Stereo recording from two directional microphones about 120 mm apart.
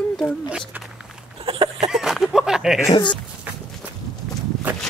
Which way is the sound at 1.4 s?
50° right (ahead or behind).